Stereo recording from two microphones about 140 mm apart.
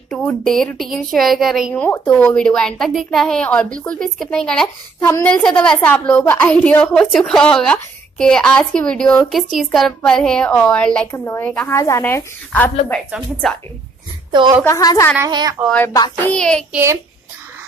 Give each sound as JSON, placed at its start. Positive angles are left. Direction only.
{"t": 0.1, "sound": "a woman's voice", "side_deg": 5}
{"t": 1.8, "sound": "a woman's voice", "side_deg": 15}
{"t": 5.0, "sound": "a woman's voice", "side_deg": 15}
{"t": 11.1, "sound": "a woman's voice", "side_deg": 20}
{"t": 13.1, "sound": "a woman's voice", "side_deg": 5}
{"t": 14.3, "sound": "a woman's voice", "side_deg": -35}
{"t": 14.6, "sound": "a woman's voice", "side_deg": 25}
{"t": 15.2, "sound": "speech", "side_deg": -25}
{"t": 16.2, "sound": "a woman's voice", "side_deg": 10}
{"t": 16.7, "sound": "speech", "side_deg": -20}